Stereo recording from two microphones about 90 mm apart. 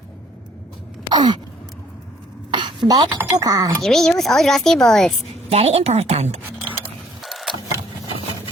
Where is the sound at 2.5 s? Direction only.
60° right (ahead or behind).